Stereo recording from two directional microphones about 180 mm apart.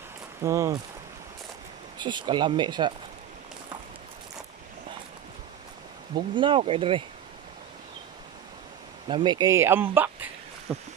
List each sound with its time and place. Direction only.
0.4 s speech: 20° right (ahead or behind)
2.0 s speech: 25° right (ahead or behind)
6.1 s speech: 25° right (ahead or behind)
9.0 s speech: 25° right (ahead or behind); by 10.8 s centre (ahead or behind)